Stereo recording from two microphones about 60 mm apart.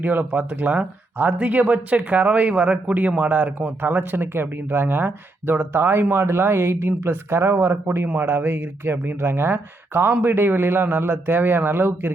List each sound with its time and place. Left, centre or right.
0.0 s speech: right